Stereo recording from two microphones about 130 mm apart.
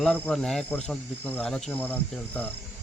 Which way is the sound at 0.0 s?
5° left (ahead or behind).